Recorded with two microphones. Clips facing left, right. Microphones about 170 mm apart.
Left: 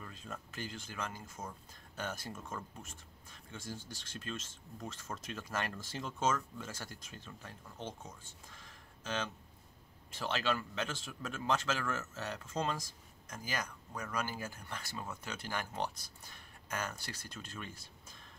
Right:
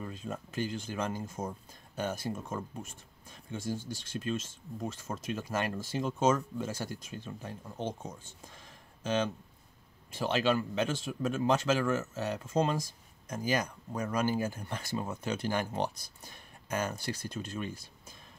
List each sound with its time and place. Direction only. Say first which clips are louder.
0.0 s speech: right 8 dB; 20° right (ahead or behind)